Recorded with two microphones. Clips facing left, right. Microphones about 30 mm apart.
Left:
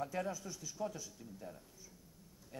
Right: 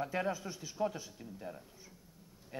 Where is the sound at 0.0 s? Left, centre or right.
Right.